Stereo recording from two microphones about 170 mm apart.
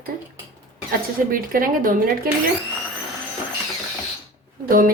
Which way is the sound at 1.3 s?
55° right (ahead or behind).